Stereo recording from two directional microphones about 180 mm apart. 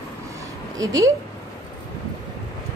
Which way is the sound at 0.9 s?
20° right (ahead or behind).